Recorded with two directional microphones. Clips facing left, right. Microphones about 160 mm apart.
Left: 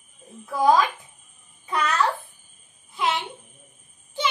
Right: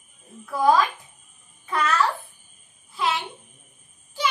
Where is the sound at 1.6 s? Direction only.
20° left (ahead or behind).